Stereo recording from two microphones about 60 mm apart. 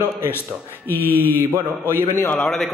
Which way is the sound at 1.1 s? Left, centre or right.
Left.